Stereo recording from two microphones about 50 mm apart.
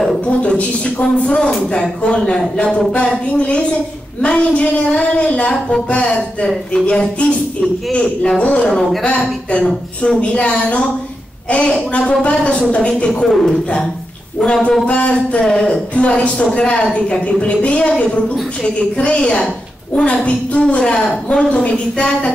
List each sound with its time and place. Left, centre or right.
0.3 s a woman's voice: left
13.3 s a man's voice: centre
14.4 s a woman's voice: centre
15.7 s a woman's voice: left
20.7 s a woman's voice: centre